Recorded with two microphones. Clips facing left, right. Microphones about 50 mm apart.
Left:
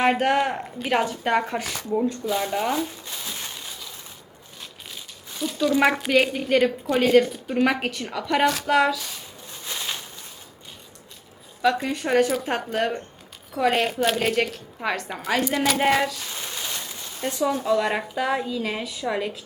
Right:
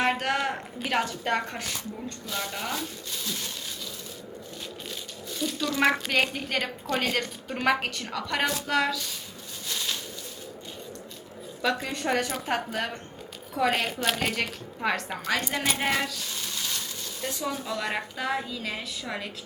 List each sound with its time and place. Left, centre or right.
0.0 s a woman's voice: centre
5.4 s a woman's voice: centre
9.6 s a sound: left
11.6 s a woman's voice: centre
16.3 s a sound: left
17.4 s a woman's voice: centre